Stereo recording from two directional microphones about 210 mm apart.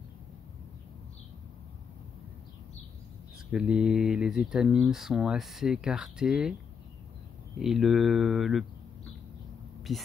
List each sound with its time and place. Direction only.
3.5 s speech: 5° right (ahead or behind)
7.5 s speech: centre (ahead or behind)
9.9 s speech: centre (ahead or behind)